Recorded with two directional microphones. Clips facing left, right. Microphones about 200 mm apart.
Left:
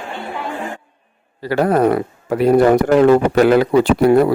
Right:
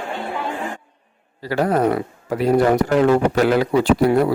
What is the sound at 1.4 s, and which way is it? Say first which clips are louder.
Speech: left 4 dB; 55° left (ahead or behind).